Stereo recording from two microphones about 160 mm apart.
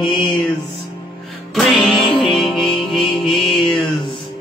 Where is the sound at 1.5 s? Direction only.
Centre (ahead or behind).